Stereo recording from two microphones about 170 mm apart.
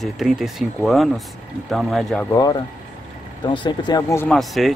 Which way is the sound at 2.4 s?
25° left (ahead or behind).